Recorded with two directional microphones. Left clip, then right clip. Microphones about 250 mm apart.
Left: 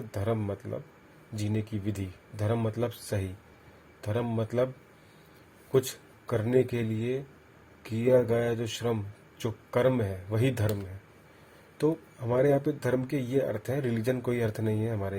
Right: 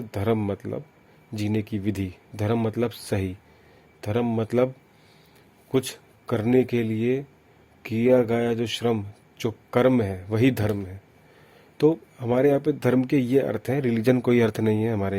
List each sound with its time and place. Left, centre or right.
0.1 s speech: right
5.7 s speech: right
11.8 s speech: right